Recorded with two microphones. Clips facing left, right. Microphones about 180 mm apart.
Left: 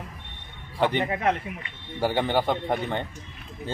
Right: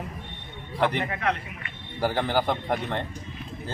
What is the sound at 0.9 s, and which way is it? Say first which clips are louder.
Speech: left 3 dB; 25° left (ahead or behind).